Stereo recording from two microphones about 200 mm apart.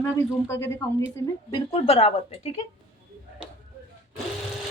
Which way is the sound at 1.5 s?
25° left (ahead or behind).